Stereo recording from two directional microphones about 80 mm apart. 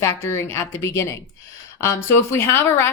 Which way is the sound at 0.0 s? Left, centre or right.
Left.